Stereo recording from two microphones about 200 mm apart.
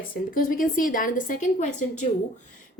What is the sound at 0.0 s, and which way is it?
Speech, 45° left (ahead or behind).